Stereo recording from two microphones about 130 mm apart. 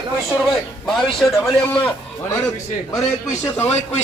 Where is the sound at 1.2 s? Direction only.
Centre (ahead or behind).